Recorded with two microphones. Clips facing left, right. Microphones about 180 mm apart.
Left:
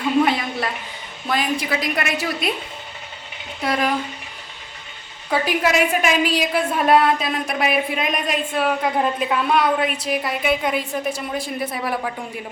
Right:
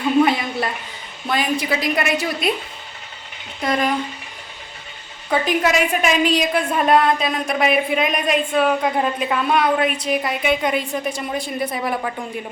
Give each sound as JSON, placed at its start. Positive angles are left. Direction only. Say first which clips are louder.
{"t": 0.3, "sound": "a sound", "louder": "right 1 dB", "side_deg": 0}
{"t": 1.3, "sound": "a woman's voice", "louder": "right 1 dB", "side_deg": 0}
{"t": 3.6, "sound": "a woman's voice", "louder": "right 1 dB", "side_deg": 5}
{"t": 5.3, "sound": "a woman's voice", "louder": "right 1 dB", "side_deg": 5}